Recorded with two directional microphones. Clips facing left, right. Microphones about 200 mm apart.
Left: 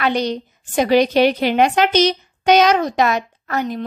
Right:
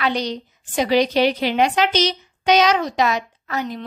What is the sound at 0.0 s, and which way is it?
A woman's voice, 55° left (ahead or behind).